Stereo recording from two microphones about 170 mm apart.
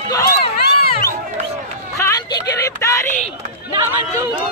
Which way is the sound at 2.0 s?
20° left (ahead or behind).